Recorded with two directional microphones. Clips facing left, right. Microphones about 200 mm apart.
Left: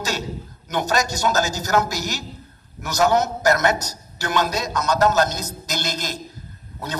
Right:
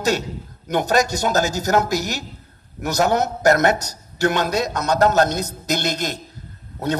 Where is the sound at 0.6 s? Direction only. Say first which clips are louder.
Right 4 dB; 55° right (ahead or behind).